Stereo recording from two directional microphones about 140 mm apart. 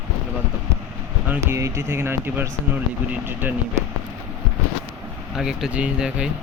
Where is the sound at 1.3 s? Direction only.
20° right (ahead or behind).